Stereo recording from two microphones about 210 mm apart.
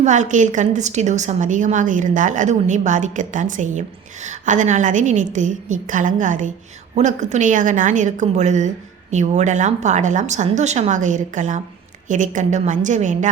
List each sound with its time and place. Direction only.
0.0 s a woman's voice: 35° right (ahead or behind)